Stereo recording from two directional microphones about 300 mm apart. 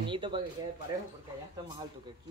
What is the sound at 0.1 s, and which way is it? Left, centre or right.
Speech, centre.